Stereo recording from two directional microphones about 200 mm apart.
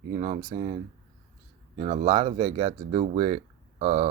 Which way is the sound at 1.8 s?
30° right (ahead or behind).